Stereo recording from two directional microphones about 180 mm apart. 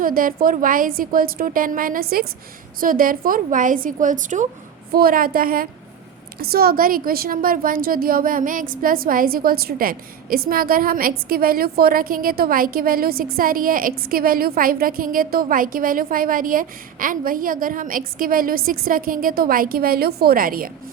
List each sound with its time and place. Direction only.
0.0 s a woman's voice: 50° right (ahead or behind)
4.9 s a woman's voice: 55° right (ahead or behind)